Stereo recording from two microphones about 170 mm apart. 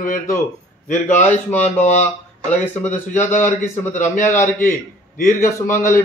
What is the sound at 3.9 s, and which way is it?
Speech, 45° left (ahead or behind).